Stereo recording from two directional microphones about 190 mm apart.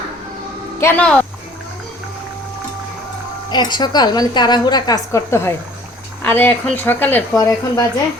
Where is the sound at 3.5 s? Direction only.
20° left (ahead or behind).